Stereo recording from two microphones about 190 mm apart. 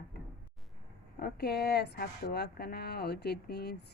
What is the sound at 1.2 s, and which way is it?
A woman's voice, 55° left (ahead or behind).